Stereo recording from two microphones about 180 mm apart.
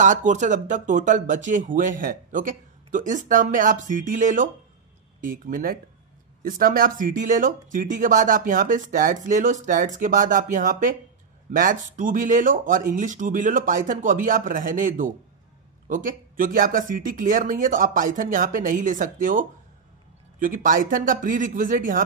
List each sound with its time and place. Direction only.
0.0 s speech: 45° right (ahead or behind)